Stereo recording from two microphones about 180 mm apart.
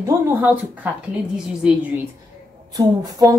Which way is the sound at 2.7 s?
20° right (ahead or behind).